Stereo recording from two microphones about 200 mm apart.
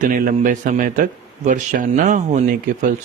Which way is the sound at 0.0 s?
45° right (ahead or behind).